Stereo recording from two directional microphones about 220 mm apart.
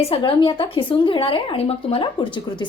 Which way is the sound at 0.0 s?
25° left (ahead or behind).